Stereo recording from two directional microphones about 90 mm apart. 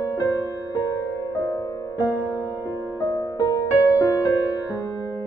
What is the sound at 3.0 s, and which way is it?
Music, 45° left (ahead or behind).